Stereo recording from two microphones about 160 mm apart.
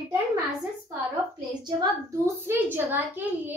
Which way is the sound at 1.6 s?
20° right (ahead or behind).